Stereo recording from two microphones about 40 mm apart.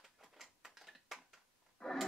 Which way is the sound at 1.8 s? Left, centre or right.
Centre.